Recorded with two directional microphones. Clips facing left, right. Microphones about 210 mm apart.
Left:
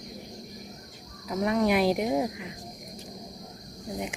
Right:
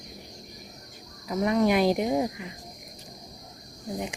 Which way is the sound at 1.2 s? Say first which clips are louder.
Right 2 dB; centre (ahead or behind).